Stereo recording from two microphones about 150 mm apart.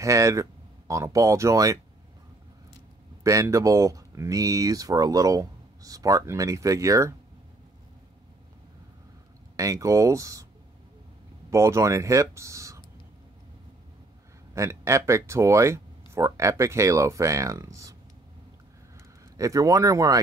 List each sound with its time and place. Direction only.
0.0 s speech: 20° right (ahead or behind)
3.3 s speech: 20° right (ahead or behind)
9.6 s speech: 20° right (ahead or behind)
11.5 s speech: 20° right (ahead or behind)
14.5 s speech: 20° right (ahead or behind)
19.3 s speech: 20° right (ahead or behind)